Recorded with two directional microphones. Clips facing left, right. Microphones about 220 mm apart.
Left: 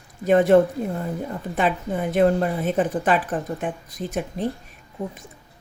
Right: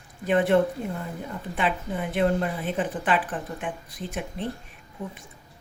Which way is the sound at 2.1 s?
45° left (ahead or behind).